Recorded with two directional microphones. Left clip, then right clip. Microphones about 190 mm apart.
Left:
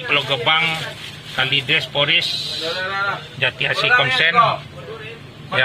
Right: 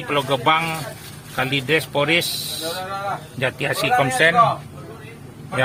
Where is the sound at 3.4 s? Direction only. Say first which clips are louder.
Left 3 dB; 60° right (ahead or behind).